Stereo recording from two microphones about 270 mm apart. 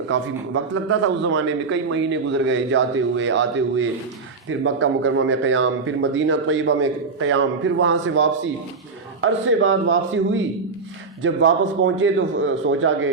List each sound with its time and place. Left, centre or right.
0.1 s speech: right